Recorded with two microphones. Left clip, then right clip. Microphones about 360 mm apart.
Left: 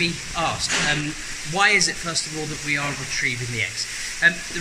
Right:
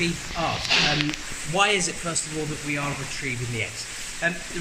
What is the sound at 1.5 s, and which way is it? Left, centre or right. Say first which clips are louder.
Speech: left 3 dB; centre.